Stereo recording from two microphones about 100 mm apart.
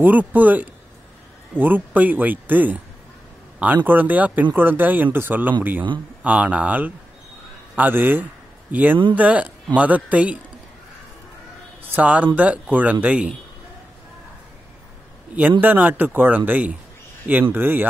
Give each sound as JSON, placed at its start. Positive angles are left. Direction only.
{"t": 0.0, "sound": "speech", "side_deg": -15}
{"t": 11.9, "sound": "speech", "side_deg": -15}
{"t": 15.6, "sound": "speech", "side_deg": -20}